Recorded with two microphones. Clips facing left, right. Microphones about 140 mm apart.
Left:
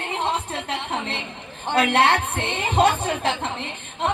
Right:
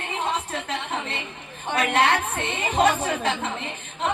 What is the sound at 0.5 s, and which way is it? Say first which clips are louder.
A woman's voice: left 1 dB; 30° left (ahead or behind).